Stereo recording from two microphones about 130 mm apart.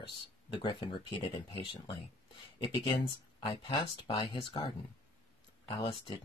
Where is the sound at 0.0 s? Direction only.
40° left (ahead or behind).